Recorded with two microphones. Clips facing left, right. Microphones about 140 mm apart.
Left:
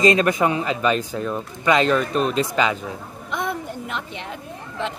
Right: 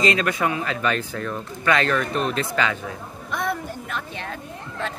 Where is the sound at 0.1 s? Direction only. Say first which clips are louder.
Left 4 dB; 20° left (ahead or behind).